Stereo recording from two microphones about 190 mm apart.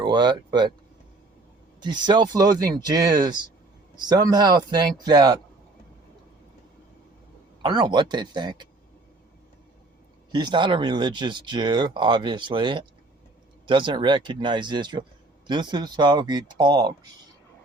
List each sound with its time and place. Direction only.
0.0 s speech: 25° right (ahead or behind)
1.8 s speech: 25° right (ahead or behind)
7.6 s speech: 25° right (ahead or behind)
10.3 s speech: 25° right (ahead or behind)